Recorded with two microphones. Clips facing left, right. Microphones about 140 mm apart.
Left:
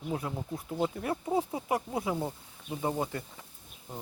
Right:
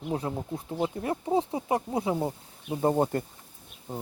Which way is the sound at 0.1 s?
30° right (ahead or behind).